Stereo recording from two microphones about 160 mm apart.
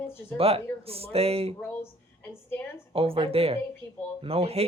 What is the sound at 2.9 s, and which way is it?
Speech, 35° right (ahead or behind).